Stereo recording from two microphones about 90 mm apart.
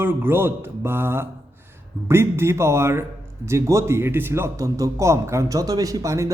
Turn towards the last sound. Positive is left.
turn(degrees=-35)  # may be behind; listen again after turning